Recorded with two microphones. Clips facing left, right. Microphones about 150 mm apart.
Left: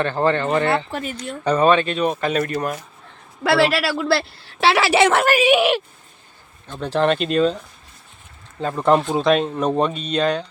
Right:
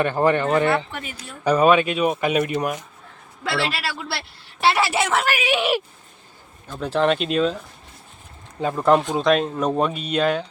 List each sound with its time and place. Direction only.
0.0 s speech: 15° right (ahead or behind)
0.9 s speech: 35° left (ahead or behind)
1.1 s speech: 10° right (ahead or behind)
3.7 s a woman's voice: 85° left; by 5.3 s 65° left (ahead or behind)
5.4 s speech: 20° left (ahead or behind)
6.7 s speech: centre (ahead or behind)
8.6 s speech: centre (ahead or behind)